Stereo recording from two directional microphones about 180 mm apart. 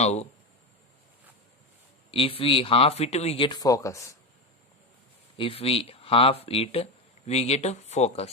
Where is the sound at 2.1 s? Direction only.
30° left (ahead or behind).